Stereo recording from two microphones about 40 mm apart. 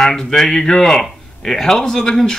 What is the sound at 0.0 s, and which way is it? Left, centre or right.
A man's voice, centre.